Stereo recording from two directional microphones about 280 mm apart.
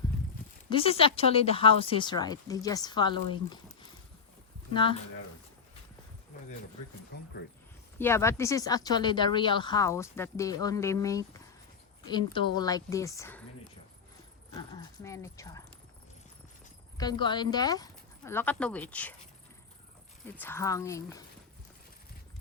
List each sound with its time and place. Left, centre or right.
0.7 s speech: centre
4.7 s speech: centre
7.1 s speech: left
7.9 s speech: centre
14.7 s speech: centre
17.0 s speech: centre
20.2 s speech: centre